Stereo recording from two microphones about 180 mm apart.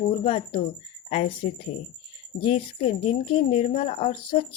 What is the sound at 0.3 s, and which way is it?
Speech, 30° left (ahead or behind).